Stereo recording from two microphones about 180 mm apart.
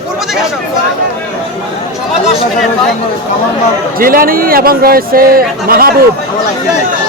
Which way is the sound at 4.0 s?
55° right (ahead or behind).